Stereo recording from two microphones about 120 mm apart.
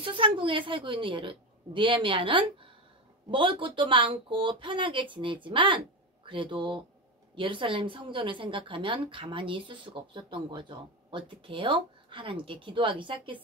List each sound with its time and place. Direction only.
0.0 s a woman's voice: 45° right (ahead or behind)